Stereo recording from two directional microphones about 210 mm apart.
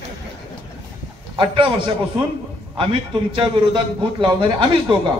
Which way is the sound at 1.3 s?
25° right (ahead or behind).